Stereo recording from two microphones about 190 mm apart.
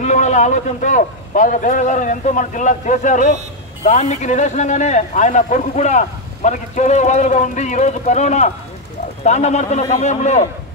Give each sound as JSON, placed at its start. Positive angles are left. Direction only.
{"t": 0.0, "sound": "speech", "side_deg": 40}